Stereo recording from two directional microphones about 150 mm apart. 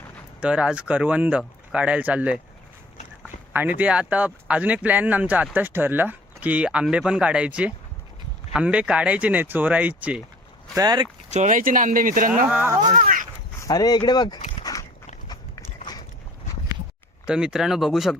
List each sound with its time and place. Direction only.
0.4 s speech: 10° right (ahead or behind)
3.5 s speech: 10° right (ahead or behind)
10.8 s speech: 30° right (ahead or behind)
11.3 s speech: 55° right (ahead or behind)
12.5 s speech: 10° right (ahead or behind)
12.9 s speech: 60° right (ahead or behind)
13.6 s speech: 25° left (ahead or behind)
14.6 s dog: 25° left (ahead or behind)
15.8 s biting: 25° left (ahead or behind)
17.2 s speech: 5° right (ahead or behind)